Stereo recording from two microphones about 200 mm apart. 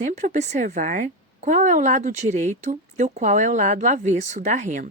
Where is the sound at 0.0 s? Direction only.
40° right (ahead or behind).